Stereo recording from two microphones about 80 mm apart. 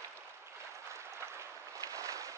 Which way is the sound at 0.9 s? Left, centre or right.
Right.